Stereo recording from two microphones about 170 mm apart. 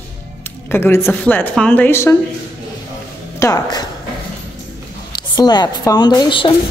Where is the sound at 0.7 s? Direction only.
15° left (ahead or behind).